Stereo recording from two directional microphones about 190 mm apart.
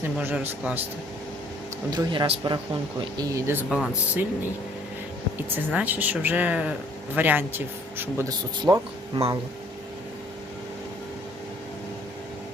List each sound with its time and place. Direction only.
0.2 s speech: 10° right (ahead or behind)
1.9 s speech: 25° right (ahead or behind); by 4.3 s 5° right (ahead or behind)
5.4 s speech: 10° right (ahead or behind)